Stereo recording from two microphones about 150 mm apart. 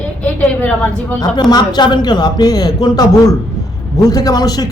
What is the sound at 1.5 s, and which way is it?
A man's voice, 30° left (ahead or behind).